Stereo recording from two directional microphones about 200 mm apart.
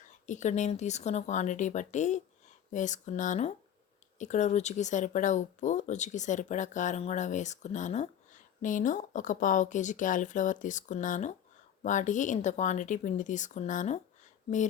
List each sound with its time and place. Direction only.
0.3 s speech: 35° left (ahead or behind)